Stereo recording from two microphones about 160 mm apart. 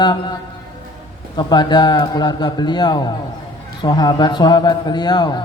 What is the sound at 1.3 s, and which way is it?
A man's voice, 25° left (ahead or behind).